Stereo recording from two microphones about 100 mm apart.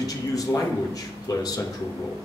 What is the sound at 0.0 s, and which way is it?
A man's voice, 35° left (ahead or behind).